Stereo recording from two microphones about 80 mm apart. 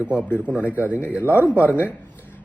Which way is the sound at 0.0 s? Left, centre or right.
Centre.